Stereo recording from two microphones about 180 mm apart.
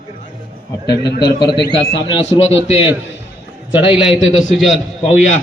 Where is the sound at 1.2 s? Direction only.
25° left (ahead or behind).